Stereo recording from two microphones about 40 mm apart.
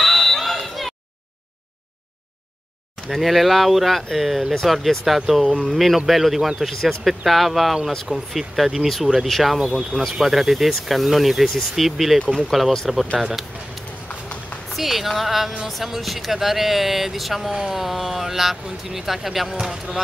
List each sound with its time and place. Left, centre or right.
0.0 s a sound: centre
3.1 s speech: centre
6.7 s speech: centre
7.1 s speech: centre
9.6 s speech: right
10.2 s speech: centre